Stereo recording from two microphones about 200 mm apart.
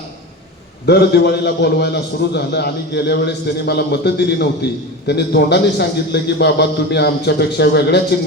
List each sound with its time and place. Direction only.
0.9 s a man's voice: 55° left (ahead or behind)